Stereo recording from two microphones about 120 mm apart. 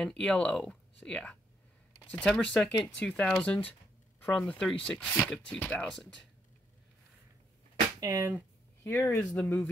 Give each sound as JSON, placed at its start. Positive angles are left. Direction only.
{"t": 0.0, "sound": "speech", "side_deg": 5}
{"t": 8.0, "sound": "speech", "side_deg": -30}
{"t": 8.8, "sound": "speech", "side_deg": 15}